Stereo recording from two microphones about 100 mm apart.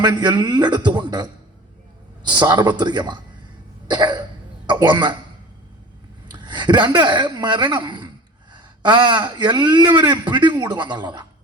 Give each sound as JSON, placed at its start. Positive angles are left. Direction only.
{"t": 0.0, "sound": "a man's voice", "side_deg": -50}
{"t": 2.4, "sound": "a man's voice", "side_deg": -45}
{"t": 3.8, "sound": "throat clearing", "side_deg": -50}
{"t": 6.3, "sound": "a man's voice", "side_deg": -50}